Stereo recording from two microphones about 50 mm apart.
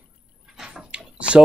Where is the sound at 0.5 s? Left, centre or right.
Centre.